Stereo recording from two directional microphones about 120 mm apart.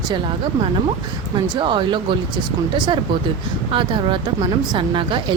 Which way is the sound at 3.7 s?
45° right (ahead or behind).